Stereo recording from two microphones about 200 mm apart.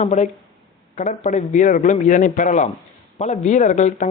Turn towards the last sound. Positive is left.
turn(degrees=40)  # may be behind; listen again after turning